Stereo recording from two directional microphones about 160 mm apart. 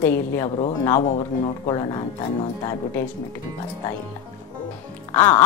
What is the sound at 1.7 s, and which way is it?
Speech, 25° left (ahead or behind).